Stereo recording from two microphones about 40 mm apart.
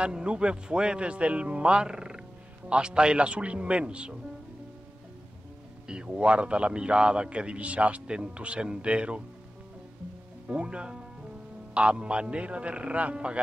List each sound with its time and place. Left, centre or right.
0.0 s speech: right
5.9 s speech: right
10.5 s speech: right